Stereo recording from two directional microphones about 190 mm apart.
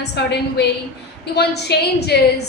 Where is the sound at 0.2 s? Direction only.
60° left (ahead or behind).